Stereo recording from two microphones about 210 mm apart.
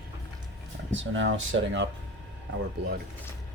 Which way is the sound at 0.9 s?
65° right (ahead or behind).